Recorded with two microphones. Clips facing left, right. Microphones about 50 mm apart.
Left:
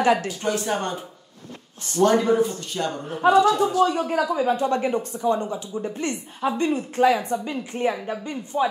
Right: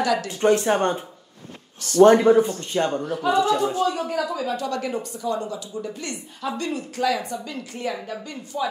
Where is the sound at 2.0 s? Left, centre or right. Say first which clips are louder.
Right 5 dB; right.